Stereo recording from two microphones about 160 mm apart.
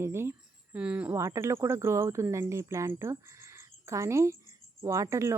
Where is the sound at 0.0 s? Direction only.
15° right (ahead or behind).